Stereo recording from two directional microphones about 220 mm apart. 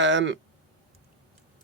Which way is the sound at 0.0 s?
55° right (ahead or behind).